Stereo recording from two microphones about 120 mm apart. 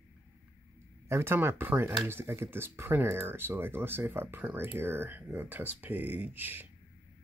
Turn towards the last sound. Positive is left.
turn(degrees=-15)  # may be behind; listen again after turning